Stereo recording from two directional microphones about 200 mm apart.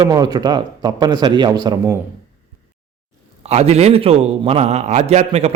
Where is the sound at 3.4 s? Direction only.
30° right (ahead or behind).